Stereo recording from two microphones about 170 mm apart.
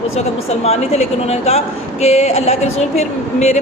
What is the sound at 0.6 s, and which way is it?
Speech, 40° left (ahead or behind).